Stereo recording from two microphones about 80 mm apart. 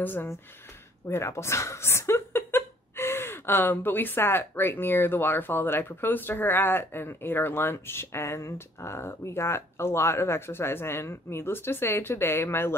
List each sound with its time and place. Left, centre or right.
0.0 s speech: left
1.0 s speech: left